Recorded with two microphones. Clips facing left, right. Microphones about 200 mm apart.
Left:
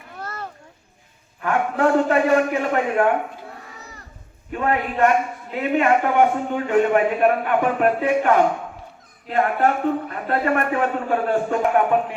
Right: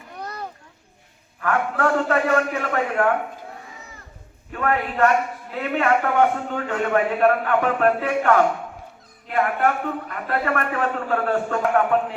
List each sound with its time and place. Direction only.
0.2 s children playing: 15° right (ahead or behind)
1.4 s a man's voice: 20° left (ahead or behind)
4.5 s a man's voice: 20° left (ahead or behind)
9.3 s a man's voice: 30° left (ahead or behind)